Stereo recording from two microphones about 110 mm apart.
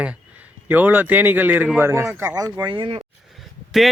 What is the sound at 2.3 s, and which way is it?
Speech, 35° right (ahead or behind).